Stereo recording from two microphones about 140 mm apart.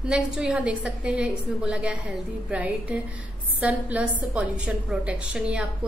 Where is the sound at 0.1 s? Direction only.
5° right (ahead or behind).